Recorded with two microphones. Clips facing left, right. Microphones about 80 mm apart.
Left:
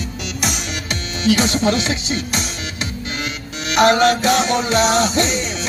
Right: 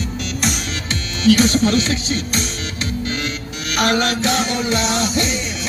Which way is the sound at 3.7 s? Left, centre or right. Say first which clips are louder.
Left 5 dB; left.